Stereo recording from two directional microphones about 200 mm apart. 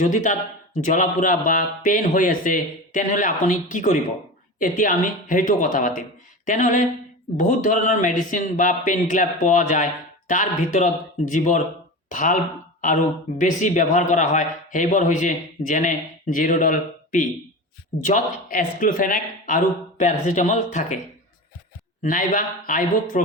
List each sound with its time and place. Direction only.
0.0 s speech: 40° left (ahead or behind)
13.4 s speech: 40° left (ahead or behind)
22.0 s speech: 40° left (ahead or behind)